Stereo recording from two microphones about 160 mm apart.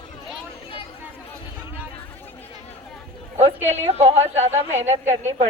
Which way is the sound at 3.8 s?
40° right (ahead or behind).